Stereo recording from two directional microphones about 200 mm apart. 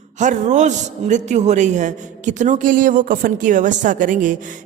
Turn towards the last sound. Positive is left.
turn(degrees=-40)  # may be behind; listen again after turning